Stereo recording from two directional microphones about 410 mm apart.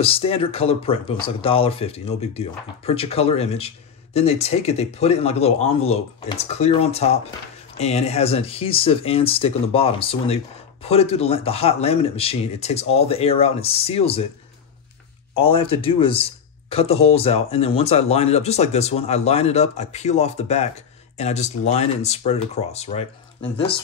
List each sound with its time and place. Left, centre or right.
0.0 s speech: centre
15.3 s speech: centre